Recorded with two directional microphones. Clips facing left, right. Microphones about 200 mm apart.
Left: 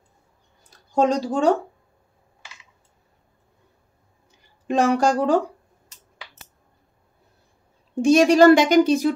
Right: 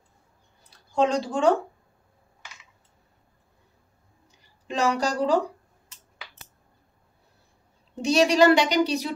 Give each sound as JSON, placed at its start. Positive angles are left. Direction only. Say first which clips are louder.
{"t": 0.7, "sound": "speech", "louder": "left 3 dB", "side_deg": 45}
{"t": 4.6, "sound": "a woman's voice", "louder": "left 6 dB", "side_deg": 50}
{"t": 7.9, "sound": "a woman's voice", "louder": "left 6 dB", "side_deg": 50}